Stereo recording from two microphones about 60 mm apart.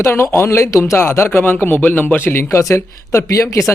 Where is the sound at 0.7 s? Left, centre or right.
Left.